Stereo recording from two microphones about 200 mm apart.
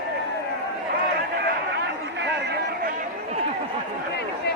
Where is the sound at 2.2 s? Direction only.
60° right (ahead or behind).